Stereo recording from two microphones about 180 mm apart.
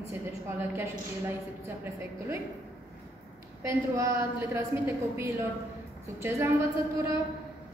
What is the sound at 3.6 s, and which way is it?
A woman's voice, 15° right (ahead or behind).